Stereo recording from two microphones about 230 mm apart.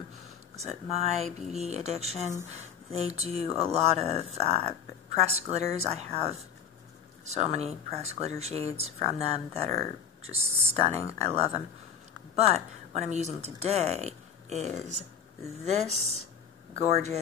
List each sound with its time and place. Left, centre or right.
0.6 s speech: right